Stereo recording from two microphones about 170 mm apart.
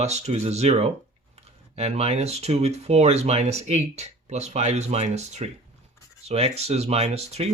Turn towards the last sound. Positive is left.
turn(degrees=-40)  # may be behind; listen again after turning